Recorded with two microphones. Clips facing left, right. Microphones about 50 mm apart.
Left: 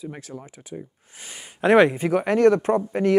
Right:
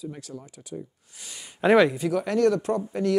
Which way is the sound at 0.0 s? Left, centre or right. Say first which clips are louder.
Left 2 dB; left.